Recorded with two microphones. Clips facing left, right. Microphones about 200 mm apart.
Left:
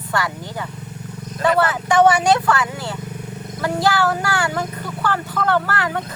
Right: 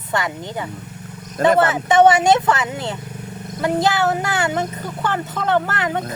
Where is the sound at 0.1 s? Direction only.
20° right (ahead or behind).